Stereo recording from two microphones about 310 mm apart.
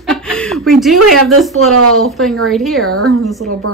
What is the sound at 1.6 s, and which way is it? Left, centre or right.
Speech, right.